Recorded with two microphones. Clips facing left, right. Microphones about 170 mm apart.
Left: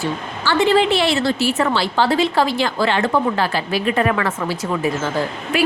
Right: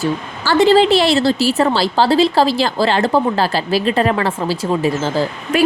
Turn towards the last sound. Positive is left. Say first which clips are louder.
# right 3 dB
turn(degrees=-35)  # may be behind; listen again after turning